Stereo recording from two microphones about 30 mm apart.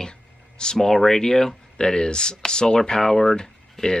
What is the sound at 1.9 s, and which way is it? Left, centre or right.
Speech, left.